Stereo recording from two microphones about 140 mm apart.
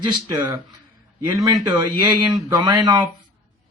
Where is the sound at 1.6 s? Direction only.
30° right (ahead or behind).